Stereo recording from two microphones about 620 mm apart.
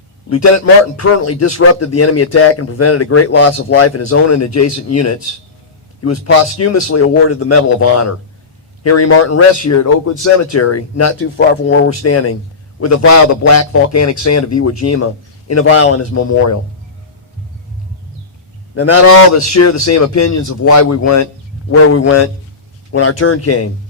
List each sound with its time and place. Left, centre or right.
0.3 s a man's voice: left
18.7 s a man's voice: left